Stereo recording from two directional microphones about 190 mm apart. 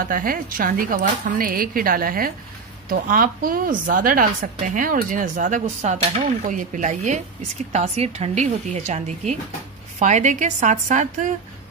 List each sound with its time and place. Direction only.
0.0 s speech: 45° right (ahead or behind)